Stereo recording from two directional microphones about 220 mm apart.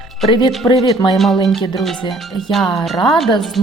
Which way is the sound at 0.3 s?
20° left (ahead or behind).